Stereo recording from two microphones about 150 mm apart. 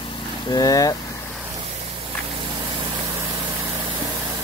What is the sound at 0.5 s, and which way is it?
Speech, 25° left (ahead or behind).